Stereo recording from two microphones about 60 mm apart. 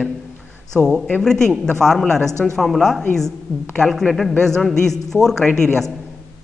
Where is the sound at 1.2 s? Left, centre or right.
Centre.